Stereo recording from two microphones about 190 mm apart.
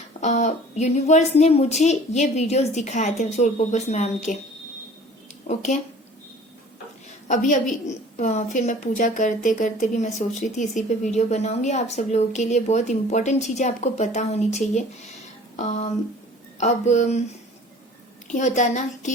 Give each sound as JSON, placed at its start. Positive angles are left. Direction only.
{"t": 0.2, "sound": "a woman's voice", "side_deg": 35}
{"t": 5.5, "sound": "a woman's voice", "side_deg": 35}
{"t": 7.3, "sound": "a woman's voice", "side_deg": 40}
{"t": 18.3, "sound": "a woman's voice", "side_deg": 40}